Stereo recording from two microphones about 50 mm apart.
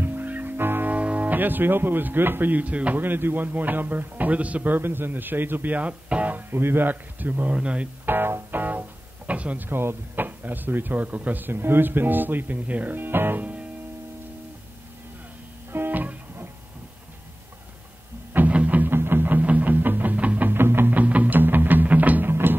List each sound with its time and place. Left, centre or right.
0.0 s music: right
0.9 s speech: right
3.0 s speech: right
4.7 s speech: right
6.5 s speech: right
8.0 s double bass: right
9.7 s speech: right
13.4 s music: right
15.7 s music: right
18.5 s music: right
18.9 s music: right
20.4 s music: right
20.9 s music: right
22.3 s music: right